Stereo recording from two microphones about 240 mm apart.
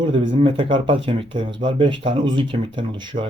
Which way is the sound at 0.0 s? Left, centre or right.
Right.